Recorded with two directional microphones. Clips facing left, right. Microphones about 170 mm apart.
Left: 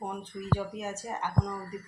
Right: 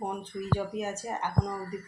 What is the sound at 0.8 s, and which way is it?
Speech, 15° right (ahead or behind).